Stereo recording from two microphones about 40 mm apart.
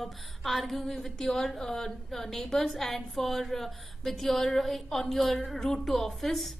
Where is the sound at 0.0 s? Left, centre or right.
Centre.